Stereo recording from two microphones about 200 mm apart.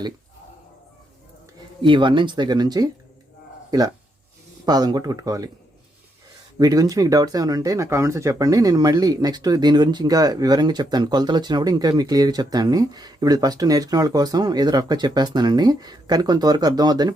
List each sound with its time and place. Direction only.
1.8 s speech: 25° right (ahead or behind)
6.6 s speech: 20° right (ahead or behind)